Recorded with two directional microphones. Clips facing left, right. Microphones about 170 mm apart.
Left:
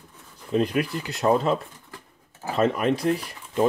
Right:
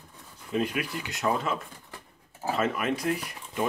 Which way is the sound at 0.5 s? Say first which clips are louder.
Left 6 dB; 35° left (ahead or behind).